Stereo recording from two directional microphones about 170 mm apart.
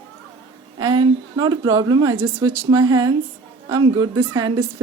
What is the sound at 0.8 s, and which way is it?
A woman's voice, 25° right (ahead or behind).